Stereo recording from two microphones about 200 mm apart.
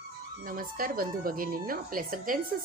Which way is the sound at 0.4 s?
45° right (ahead or behind).